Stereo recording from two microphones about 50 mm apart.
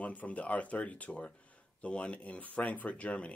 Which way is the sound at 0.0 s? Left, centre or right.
Left.